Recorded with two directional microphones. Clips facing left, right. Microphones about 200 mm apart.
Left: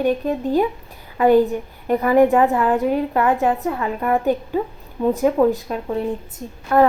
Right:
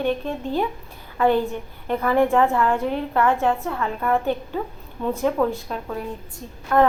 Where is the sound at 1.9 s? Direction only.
15° left (ahead or behind).